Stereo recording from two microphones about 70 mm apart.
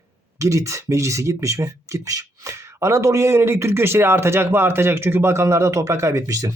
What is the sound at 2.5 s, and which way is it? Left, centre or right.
A man's voice, right.